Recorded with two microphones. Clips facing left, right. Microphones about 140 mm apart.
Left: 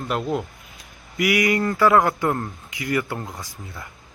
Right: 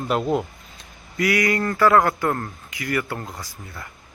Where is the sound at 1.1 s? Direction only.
20° left (ahead or behind).